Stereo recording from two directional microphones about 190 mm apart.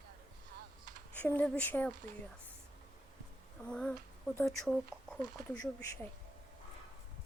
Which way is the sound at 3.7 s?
5° left (ahead or behind).